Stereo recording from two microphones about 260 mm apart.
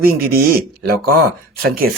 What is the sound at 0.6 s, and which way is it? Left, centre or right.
Speech, right.